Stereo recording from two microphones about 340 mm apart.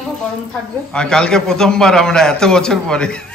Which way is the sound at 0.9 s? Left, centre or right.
Centre.